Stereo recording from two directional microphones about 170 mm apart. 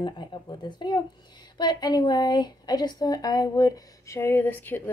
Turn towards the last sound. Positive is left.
turn(degrees=10)  # may be behind; listen again after turning